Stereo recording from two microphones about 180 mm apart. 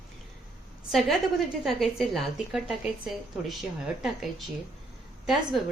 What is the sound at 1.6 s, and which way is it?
A woman's voice, centre (ahead or behind).